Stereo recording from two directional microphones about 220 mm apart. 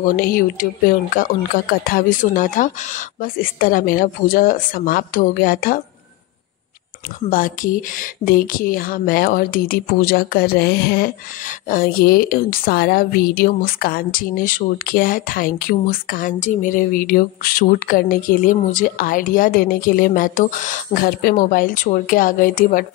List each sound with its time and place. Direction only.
0.0 s speech: 40° left (ahead or behind)
7.2 s speech: 40° left (ahead or behind)